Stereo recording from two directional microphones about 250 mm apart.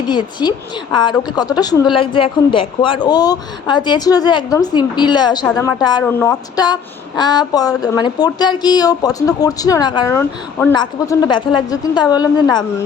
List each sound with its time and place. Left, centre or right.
0.1 s speech: centre